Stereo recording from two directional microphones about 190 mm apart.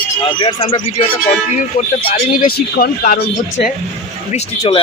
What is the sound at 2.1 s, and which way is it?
Speech, 45° left (ahead or behind).